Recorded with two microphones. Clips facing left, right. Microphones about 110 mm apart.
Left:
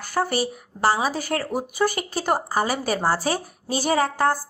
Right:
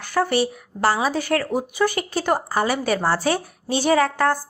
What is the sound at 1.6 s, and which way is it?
Speech, 40° left (ahead or behind).